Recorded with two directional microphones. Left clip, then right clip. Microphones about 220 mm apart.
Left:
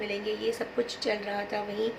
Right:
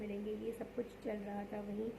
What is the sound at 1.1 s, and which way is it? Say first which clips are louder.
Speech: left 13 dB; 15° left (ahead or behind).